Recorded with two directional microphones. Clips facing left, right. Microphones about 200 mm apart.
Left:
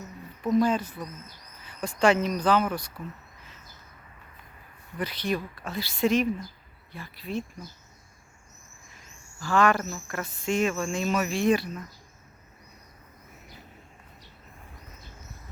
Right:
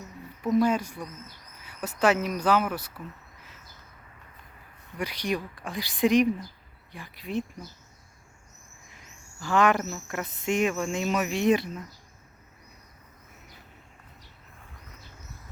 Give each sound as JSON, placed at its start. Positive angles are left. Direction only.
{"t": 0.4, "sound": "speech", "side_deg": -10}
{"t": 4.9, "sound": "speech", "side_deg": -10}
{"t": 9.0, "sound": "a sound", "side_deg": -20}
{"t": 9.9, "sound": "speech", "side_deg": -20}